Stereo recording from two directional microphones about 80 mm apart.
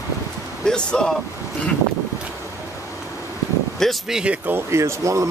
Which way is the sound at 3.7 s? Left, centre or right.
Centre.